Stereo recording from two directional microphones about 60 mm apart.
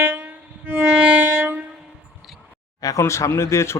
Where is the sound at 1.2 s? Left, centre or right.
Right.